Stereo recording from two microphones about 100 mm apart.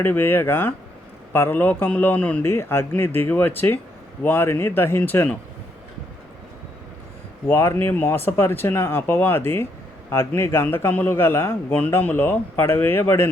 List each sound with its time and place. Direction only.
0.0 s a man's voice: 20° left (ahead or behind)
7.4 s a man's voice: 25° left (ahead or behind)